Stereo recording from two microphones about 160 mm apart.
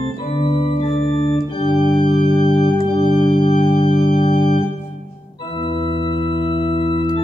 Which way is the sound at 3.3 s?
30° left (ahead or behind).